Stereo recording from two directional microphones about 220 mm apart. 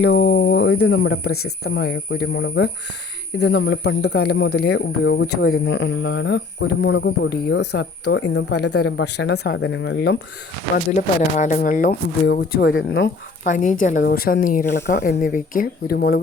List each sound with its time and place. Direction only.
0.0 s speech: 45° left (ahead or behind)
0.7 s speech: 70° left (ahead or behind); by 10.2 s 55° left (ahead or behind)
10.8 s speech: 35° left (ahead or behind)
12.6 s speech: 60° left (ahead or behind)
13.4 s speech: 35° left (ahead or behind)